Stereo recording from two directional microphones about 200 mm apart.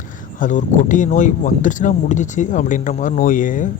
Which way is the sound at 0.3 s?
40° left (ahead or behind).